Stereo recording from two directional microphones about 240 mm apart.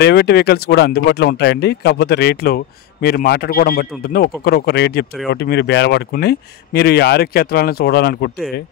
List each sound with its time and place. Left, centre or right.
0.0 s speech: left